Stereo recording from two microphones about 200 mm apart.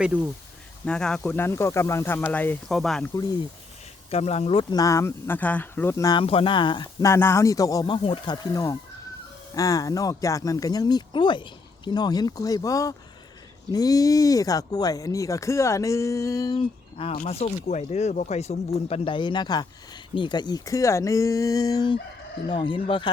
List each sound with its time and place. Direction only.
0.0 s speech: 5° right (ahead or behind)
4.1 s speech: 30° left (ahead or behind)
9.6 s speech: 15° left (ahead or behind)